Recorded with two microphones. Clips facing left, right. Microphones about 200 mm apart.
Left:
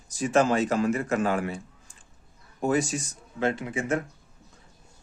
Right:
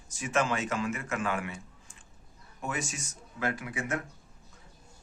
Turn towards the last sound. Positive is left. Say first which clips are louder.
# left 6 dB
turn(degrees=25)  # may be behind; listen again after turning